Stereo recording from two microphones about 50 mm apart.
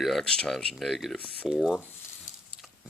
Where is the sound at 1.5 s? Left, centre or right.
Centre.